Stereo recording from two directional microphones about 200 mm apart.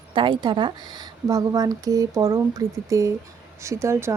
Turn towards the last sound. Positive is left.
turn(degrees=-15)  # may be behind; listen again after turning